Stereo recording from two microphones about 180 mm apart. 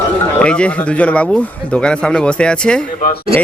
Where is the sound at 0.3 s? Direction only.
5° left (ahead or behind).